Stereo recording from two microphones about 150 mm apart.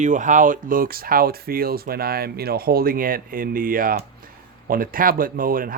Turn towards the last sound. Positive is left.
turn(degrees=-70)  # may be behind; listen again after turning